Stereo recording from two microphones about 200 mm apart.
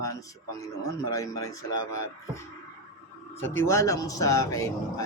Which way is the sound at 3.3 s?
10° left (ahead or behind).